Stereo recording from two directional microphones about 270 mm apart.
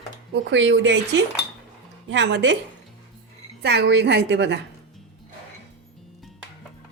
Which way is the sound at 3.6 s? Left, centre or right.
Right.